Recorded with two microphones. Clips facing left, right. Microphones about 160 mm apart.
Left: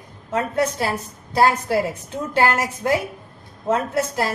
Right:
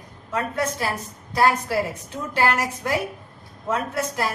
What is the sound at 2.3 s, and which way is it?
A woman's voice, 25° left (ahead or behind).